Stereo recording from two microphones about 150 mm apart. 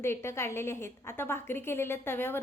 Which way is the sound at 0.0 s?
15° left (ahead or behind).